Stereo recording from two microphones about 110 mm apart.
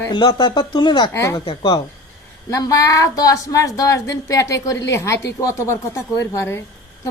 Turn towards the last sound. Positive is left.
turn(degrees=30)  # may be behind; listen again after turning